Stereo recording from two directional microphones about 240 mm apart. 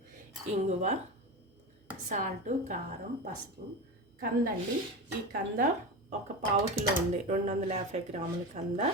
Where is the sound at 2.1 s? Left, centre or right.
Right.